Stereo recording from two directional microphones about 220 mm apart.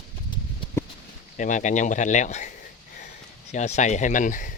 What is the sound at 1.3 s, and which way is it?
Speech, 35° left (ahead or behind).